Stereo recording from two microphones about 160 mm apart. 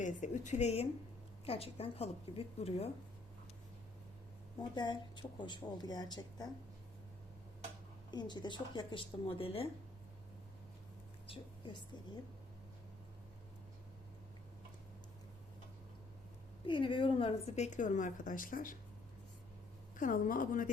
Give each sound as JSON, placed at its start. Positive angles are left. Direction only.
{"t": 0.0, "sound": "a woman's voice", "side_deg": 50}
{"t": 4.7, "sound": "speech", "side_deg": 30}
{"t": 8.1, "sound": "speech", "side_deg": 25}
{"t": 11.3, "sound": "a woman's voice", "side_deg": 30}
{"t": 16.6, "sound": "a woman's voice", "side_deg": 30}
{"t": 20.0, "sound": "a woman's voice", "side_deg": 55}